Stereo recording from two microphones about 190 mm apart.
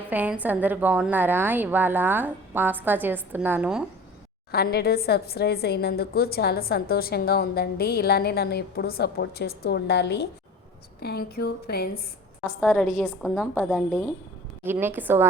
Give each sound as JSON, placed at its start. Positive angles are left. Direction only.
{"t": 0.1, "sound": "a woman's voice", "side_deg": -10}
{"t": 4.5, "sound": "a woman's voice", "side_deg": 55}
{"t": 12.5, "sound": "a woman's voice", "side_deg": 5}
{"t": 14.6, "sound": "a woman's voice", "side_deg": -10}